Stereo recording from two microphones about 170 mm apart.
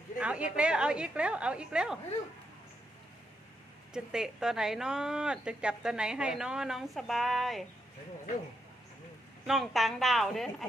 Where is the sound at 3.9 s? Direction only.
5° right (ahead or behind).